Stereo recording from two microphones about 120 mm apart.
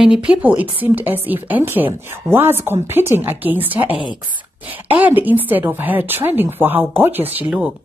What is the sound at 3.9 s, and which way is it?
Speech, 45° left (ahead or behind).